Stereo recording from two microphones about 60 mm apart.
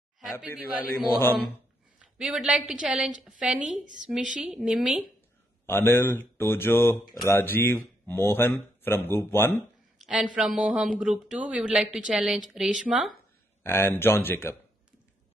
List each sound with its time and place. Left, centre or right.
0.6 s a man's voice: right
2.1 s a man's voice: centre
5.7 s speech: left
9.9 s speech: centre
13.6 s speech: left